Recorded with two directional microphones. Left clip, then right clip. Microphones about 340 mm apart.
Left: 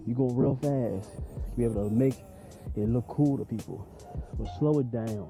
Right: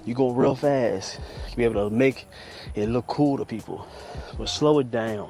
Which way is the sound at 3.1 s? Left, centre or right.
Centre.